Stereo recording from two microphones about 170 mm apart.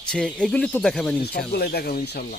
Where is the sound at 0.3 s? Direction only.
5° left (ahead or behind).